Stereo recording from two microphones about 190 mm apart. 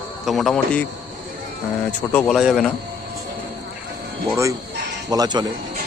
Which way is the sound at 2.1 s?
Centre (ahead or behind).